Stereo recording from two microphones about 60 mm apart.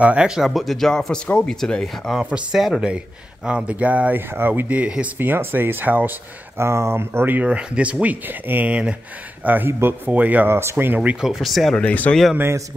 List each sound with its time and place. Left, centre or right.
0.0 s speech: right
0.3 s speech: centre
2.1 s speech: centre
3.4 s speech: centre
4.3 s speech: right
4.6 s speech: right
5.2 s speech: right
6.6 s speech: right
7.3 s speech: centre
9.7 s speech: right
10.0 s speech: right
10.5 s speech: right
11.0 s speech: centre
11.7 s speech: left